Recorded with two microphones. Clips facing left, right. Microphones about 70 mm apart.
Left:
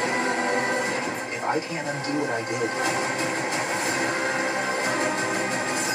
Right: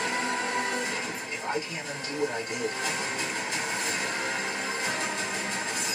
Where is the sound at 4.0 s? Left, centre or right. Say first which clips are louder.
Left 6 dB; left.